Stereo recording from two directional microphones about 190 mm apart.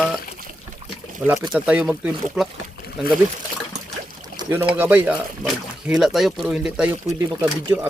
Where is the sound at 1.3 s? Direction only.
5° right (ahead or behind).